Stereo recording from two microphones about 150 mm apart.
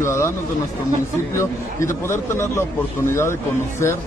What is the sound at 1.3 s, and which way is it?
A man's voice, 20° left (ahead or behind).